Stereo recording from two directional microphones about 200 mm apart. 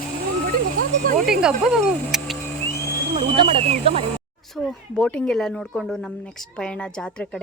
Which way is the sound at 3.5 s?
30° right (ahead or behind).